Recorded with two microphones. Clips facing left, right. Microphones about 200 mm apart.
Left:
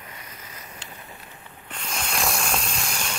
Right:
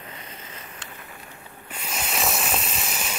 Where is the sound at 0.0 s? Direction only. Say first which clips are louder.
Right 2 dB; 25° right (ahead or behind).